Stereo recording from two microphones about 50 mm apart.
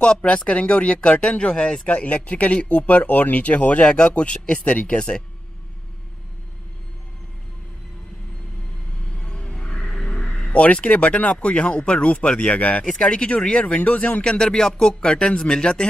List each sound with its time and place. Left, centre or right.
0.0 s speech: centre
9.1 s speech: centre
12.8 s speech: centre